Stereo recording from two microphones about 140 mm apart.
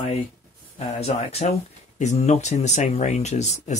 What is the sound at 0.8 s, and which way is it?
A man's voice, 50° left (ahead or behind).